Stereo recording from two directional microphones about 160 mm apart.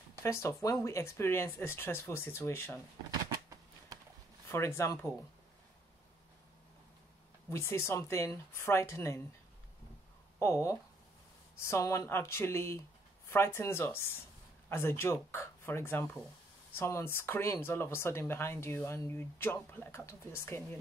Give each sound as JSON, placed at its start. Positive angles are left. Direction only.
{"t": 0.2, "sound": "speech", "side_deg": 15}
{"t": 4.5, "sound": "speech", "side_deg": 15}
{"t": 7.5, "sound": "speech", "side_deg": 15}
{"t": 10.4, "sound": "speech", "side_deg": 15}